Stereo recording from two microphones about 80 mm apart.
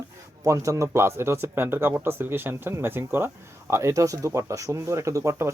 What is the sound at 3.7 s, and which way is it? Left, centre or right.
Speech, right.